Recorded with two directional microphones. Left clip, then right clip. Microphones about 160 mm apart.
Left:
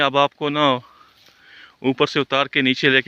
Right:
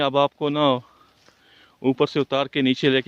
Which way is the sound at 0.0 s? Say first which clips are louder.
Left 3 dB; 5° right (ahead or behind).